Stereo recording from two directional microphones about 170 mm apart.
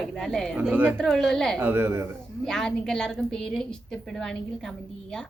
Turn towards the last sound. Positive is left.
turn(degrees=5)  # may be behind; listen again after turning